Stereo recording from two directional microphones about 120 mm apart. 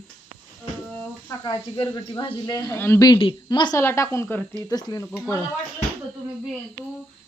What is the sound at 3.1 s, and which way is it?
Speech, 45° left (ahead or behind).